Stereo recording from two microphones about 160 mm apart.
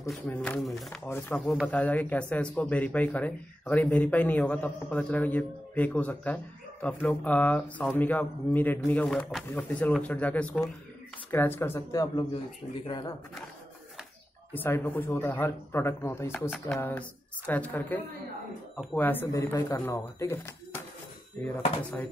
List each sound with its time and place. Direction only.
0.1 s a man's voice: 5° left (ahead or behind)
1.4 s a man's voice: 5° left (ahead or behind); by 13.1 s 30° left (ahead or behind)
14.5 s a man's voice: 10° left (ahead or behind)